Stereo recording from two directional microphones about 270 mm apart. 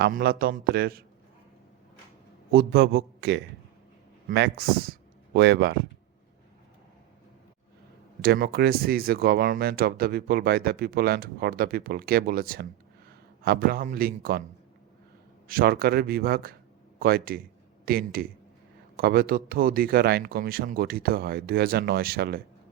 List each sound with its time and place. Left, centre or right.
0.0 s speech: right
2.5 s speech: right
8.2 s speech: right
15.4 s speech: right